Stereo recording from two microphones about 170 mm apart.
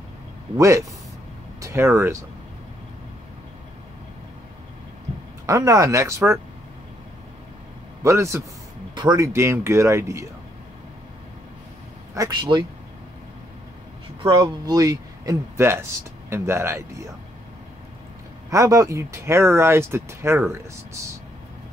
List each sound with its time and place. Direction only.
0.6 s speech: 20° right (ahead or behind)
5.5 s speech: 20° right (ahead or behind)
8.0 s speech: 15° right (ahead or behind)
12.1 s speech: 20° right (ahead or behind)
14.2 s speech: 25° right (ahead or behind)
18.5 s speech: 20° right (ahead or behind)